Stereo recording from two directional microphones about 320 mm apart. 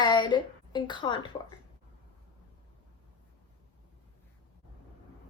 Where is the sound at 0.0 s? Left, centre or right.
Centre.